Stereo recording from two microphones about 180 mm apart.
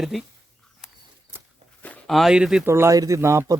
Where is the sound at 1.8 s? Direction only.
5° left (ahead or behind).